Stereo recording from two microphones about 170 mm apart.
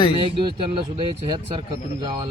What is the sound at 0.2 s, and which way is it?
Speech, 30° right (ahead or behind).